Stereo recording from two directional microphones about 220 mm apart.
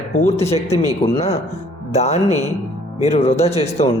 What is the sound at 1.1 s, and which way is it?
Speech, 30° left (ahead or behind).